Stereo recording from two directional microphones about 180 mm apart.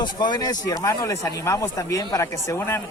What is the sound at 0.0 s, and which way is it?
Speech, 25° left (ahead or behind).